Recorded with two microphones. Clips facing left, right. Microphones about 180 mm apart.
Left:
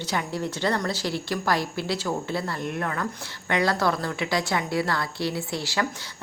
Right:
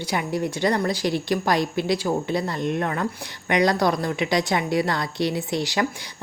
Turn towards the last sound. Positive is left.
turn(degrees=-20)  # may be behind; listen again after turning